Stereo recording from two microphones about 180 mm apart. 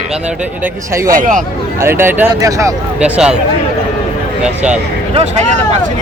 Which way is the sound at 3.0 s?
5° right (ahead or behind).